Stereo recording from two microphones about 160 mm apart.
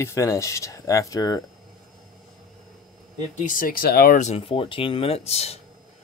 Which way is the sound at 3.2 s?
55° left (ahead or behind).